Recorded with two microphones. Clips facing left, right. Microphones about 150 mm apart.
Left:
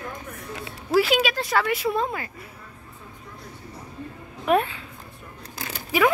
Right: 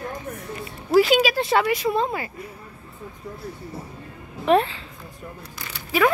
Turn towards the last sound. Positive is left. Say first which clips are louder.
# right 1 dB
turn(degrees=15)  # may be behind; listen again after turning